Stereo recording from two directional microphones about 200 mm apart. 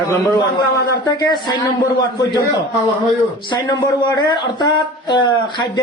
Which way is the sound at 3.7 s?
20° left (ahead or behind).